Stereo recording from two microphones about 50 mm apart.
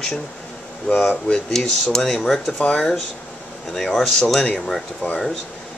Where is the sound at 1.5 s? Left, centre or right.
Centre.